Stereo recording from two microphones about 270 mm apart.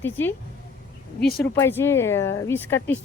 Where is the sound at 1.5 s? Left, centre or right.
Centre.